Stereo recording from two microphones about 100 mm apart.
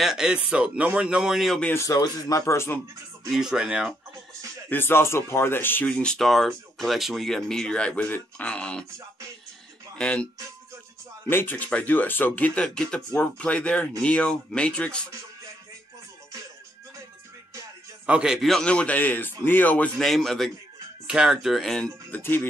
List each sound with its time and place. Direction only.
0.0 s speech: 5° right (ahead or behind)
1.7 s a man's voice: 30° left (ahead or behind)
3.3 s speech: 5° right (ahead or behind)
4.6 s a man's voice: 20° left (ahead or behind)
5.9 s speech: 10° left (ahead or behind)
9.9 s speech: 10° left (ahead or behind)
11.2 s speech: 20° left (ahead or behind)
18.0 s speech: 10° right (ahead or behind); by 19.9 s 15° left (ahead or behind)
20.0 s speech: 5° left (ahead or behind)
22.1 s a man's voice: 20° left (ahead or behind)